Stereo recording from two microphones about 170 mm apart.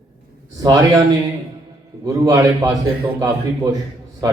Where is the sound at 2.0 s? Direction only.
20° right (ahead or behind).